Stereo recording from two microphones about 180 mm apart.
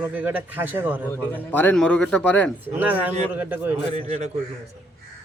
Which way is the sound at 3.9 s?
30° right (ahead or behind).